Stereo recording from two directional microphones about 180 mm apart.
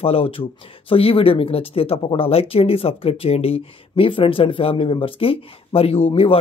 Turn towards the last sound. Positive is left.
turn(degrees=30)  # may be behind; listen again after turning